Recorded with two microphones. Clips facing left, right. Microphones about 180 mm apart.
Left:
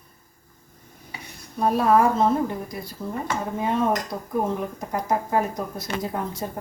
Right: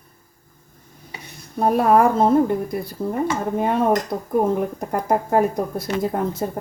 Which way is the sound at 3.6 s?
55° right (ahead or behind).